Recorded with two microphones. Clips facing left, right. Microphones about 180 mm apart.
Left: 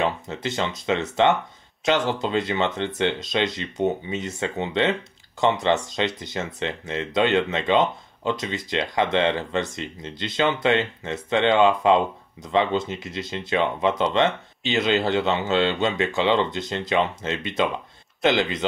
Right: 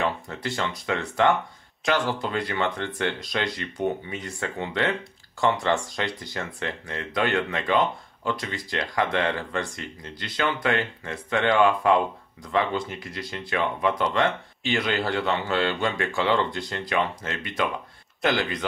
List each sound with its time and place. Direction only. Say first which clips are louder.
0.0 s speech: left 2 dB; 20° left (ahead or behind)